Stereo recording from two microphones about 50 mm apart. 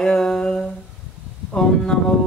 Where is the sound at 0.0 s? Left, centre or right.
Centre.